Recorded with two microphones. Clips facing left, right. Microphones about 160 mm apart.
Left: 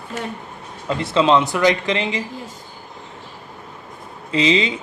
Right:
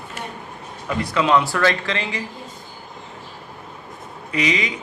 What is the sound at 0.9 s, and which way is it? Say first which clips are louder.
Speech: left 2 dB; 25° left (ahead or behind).